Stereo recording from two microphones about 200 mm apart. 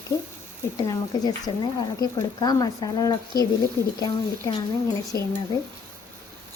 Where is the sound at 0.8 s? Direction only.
20° left (ahead or behind).